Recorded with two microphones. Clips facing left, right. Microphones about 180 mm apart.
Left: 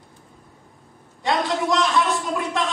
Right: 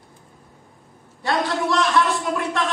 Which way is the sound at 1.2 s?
20° left (ahead or behind).